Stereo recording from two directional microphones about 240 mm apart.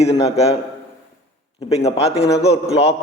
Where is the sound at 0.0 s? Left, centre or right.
Left.